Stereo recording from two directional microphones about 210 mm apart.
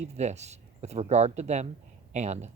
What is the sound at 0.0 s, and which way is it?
Speech, 30° right (ahead or behind).